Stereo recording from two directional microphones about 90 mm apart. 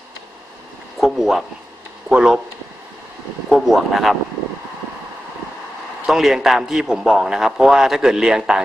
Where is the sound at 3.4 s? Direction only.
Centre (ahead or behind).